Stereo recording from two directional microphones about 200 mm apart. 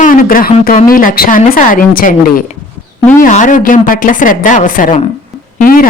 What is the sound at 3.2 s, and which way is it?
Speech, 40° left (ahead or behind).